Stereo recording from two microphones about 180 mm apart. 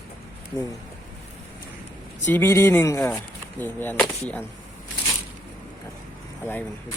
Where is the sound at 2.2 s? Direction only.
10° left (ahead or behind).